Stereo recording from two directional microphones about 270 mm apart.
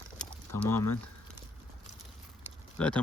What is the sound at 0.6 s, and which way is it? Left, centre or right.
Speech, centre.